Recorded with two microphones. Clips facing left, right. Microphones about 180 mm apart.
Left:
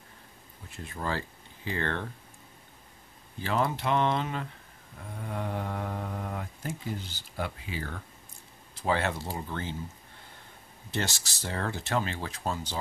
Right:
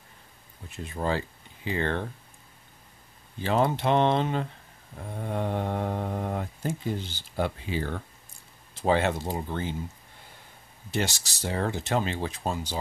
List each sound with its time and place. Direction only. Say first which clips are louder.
0.7 s speech: right 5 dB; 20° right (ahead or behind)
3.3 s speech: right 4 dB; 25° right (ahead or behind)
8.8 s speech: right 5 dB; 20° right (ahead or behind)
10.9 s speech: right 4 dB; 15° right (ahead or behind)